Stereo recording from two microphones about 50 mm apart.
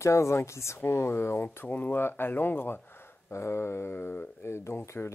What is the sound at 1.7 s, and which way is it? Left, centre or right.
Speech, left.